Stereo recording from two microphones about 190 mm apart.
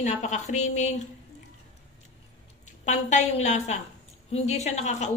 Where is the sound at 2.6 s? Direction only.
40° left (ahead or behind).